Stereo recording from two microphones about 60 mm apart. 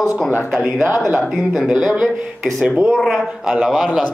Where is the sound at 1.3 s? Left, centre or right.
Centre.